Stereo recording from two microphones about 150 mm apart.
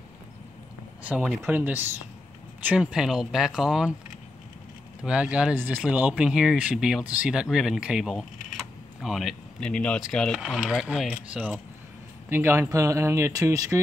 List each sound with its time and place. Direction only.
1.0 s speech: 10° right (ahead or behind)
5.0 s speech: 5° right (ahead or behind); by 13.7 s 20° right (ahead or behind)